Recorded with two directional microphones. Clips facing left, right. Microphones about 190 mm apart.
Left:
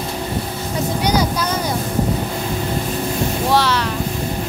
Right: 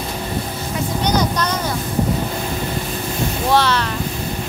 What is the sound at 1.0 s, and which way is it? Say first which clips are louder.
Vehicle: even; 10° left (ahead or behind).